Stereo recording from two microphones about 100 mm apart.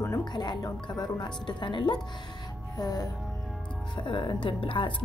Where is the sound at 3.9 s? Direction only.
55° left (ahead or behind).